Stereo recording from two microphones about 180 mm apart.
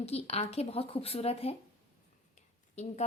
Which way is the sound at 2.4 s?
40° left (ahead or behind).